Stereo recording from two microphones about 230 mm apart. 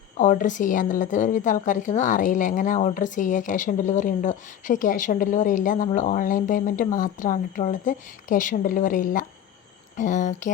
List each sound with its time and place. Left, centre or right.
0.2 s a woman's voice: left